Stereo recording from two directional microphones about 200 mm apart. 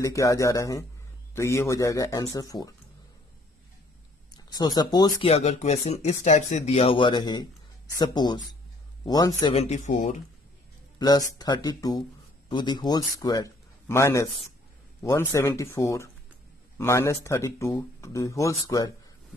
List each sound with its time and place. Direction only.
0.0 s speech: 15° left (ahead or behind)
4.5 s speech: 20° left (ahead or behind)
5.3 s speech: 35° left (ahead or behind)
11.0 s a man's voice: 20° left (ahead or behind)